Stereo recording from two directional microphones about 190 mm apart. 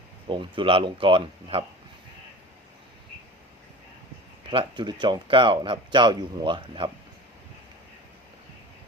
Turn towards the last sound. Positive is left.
turn(degrees=-25)  # may be behind; listen again after turning